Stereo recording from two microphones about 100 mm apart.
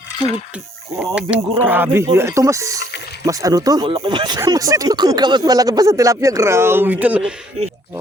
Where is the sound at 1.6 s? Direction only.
20° right (ahead or behind); by 3.9 s 40° right (ahead or behind).